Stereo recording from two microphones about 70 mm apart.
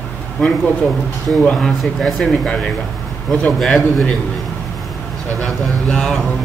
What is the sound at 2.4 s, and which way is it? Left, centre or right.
A man's voice, centre.